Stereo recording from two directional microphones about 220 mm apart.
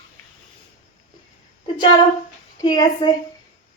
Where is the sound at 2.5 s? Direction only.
20° left (ahead or behind).